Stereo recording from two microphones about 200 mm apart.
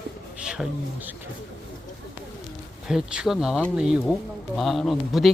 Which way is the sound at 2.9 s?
5° right (ahead or behind).